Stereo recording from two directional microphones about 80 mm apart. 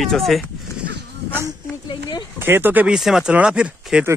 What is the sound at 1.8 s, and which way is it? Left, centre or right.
Speech, left.